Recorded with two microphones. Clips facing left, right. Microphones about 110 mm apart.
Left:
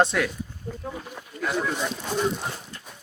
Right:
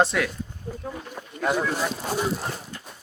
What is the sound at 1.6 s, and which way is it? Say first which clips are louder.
Speech: right 2 dB; centre (ahead or behind).